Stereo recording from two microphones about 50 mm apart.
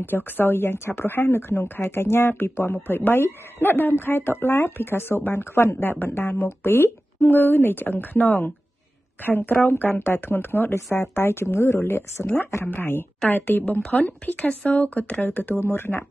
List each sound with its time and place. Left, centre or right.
0.1 s speech: left
5.8 s speech: left
10.7 s speech: left
13.9 s speech: left
15.5 s speech: left